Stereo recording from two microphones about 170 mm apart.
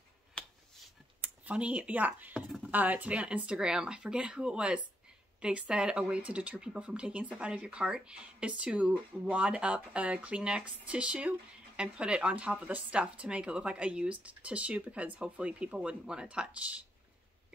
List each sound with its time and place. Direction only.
1.2 s speech: 10° right (ahead or behind)